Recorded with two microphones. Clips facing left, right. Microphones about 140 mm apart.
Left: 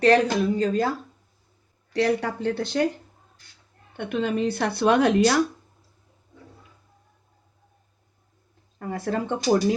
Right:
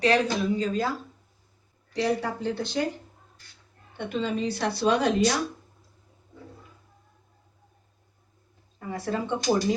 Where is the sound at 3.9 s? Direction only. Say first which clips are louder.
Left 3 dB; 60° left (ahead or behind).